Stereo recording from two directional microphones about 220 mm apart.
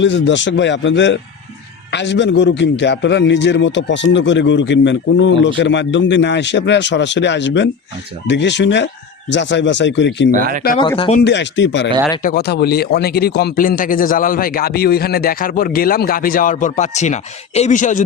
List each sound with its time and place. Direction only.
0.0 s a man's voice: 55° left (ahead or behind)
10.3 s speech: 40° right (ahead or behind)
10.8 s speech: 20° left (ahead or behind)
11.2 s a man's voice: 55° left (ahead or behind); by 18.0 s 35° left (ahead or behind)